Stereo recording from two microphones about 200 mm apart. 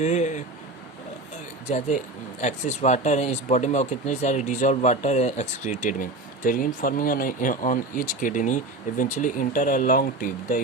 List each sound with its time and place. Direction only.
0.0 s speech: 35° left (ahead or behind)
2.4 s speech: 35° left (ahead or behind)